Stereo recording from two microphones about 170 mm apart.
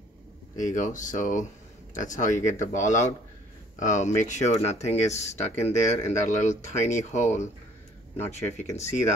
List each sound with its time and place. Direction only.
0.6 s speech: 50° left (ahead or behind)